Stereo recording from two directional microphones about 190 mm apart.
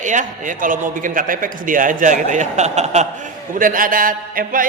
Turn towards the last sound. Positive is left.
turn(degrees=-45)  # may be behind; listen again after turning